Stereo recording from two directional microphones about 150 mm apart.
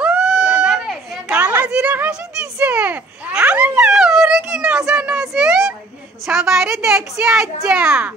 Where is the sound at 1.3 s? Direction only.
10° right (ahead or behind).